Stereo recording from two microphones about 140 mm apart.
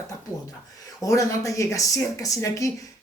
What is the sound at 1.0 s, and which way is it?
Speech, 25° left (ahead or behind).